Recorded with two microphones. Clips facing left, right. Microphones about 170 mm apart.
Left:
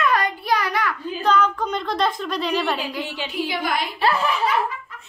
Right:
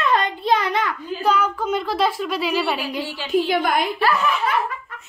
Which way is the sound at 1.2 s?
10° right (ahead or behind).